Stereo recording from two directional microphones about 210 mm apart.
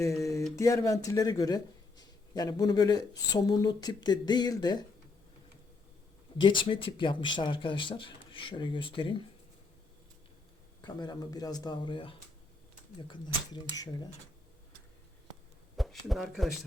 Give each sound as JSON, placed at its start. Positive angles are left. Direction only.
{"t": 0.0, "sound": "a sound", "side_deg": 15}
{"t": 0.5, "sound": "speech", "side_deg": 15}
{"t": 6.4, "sound": "speech", "side_deg": 25}
{"t": 10.8, "sound": "speech", "side_deg": 20}
{"t": 15.7, "sound": "speech", "side_deg": 0}